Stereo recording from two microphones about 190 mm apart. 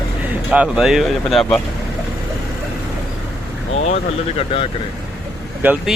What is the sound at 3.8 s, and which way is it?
Speech, 30° left (ahead or behind).